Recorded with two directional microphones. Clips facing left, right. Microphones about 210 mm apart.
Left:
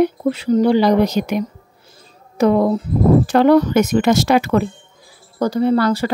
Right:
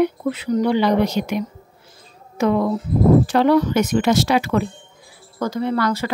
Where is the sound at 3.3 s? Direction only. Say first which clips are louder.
Left 4 dB; 50° left (ahead or behind).